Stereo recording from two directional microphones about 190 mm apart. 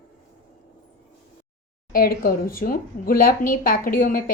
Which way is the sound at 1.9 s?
50° left (ahead or behind).